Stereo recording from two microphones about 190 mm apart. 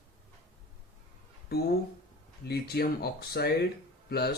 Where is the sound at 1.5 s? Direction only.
55° left (ahead or behind).